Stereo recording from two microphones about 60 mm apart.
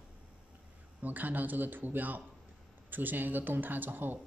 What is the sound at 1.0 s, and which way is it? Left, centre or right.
Speech, right.